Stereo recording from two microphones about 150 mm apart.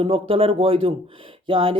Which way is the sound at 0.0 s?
40° right (ahead or behind).